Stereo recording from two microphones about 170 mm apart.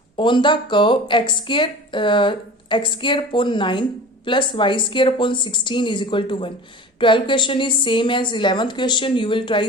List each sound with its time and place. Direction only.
0.2 s a woman's voice: 30° left (ahead or behind)